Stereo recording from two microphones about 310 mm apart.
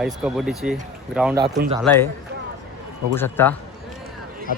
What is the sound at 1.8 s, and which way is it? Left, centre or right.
Speech, centre.